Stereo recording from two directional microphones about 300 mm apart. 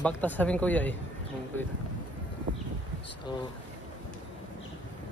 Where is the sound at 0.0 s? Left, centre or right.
Centre.